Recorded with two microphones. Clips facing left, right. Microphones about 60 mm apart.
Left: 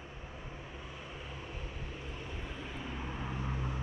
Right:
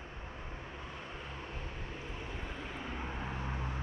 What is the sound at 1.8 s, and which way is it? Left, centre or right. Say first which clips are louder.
Vehicle: right 1 dB; right.